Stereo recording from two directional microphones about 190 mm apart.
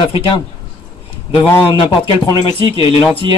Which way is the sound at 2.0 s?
30° left (ahead or behind).